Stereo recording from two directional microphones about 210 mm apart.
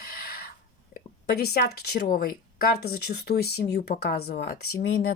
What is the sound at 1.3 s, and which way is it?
Speech, 50° left (ahead or behind).